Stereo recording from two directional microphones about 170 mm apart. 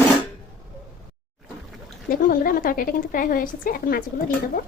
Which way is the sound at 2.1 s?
55° left (ahead or behind).